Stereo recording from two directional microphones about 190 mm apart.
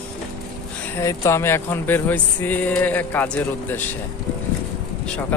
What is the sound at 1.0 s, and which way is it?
Speech, 15° left (ahead or behind).